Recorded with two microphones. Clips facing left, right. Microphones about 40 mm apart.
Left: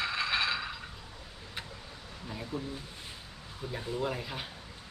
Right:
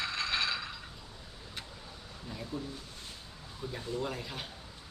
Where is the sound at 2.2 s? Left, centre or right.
Centre.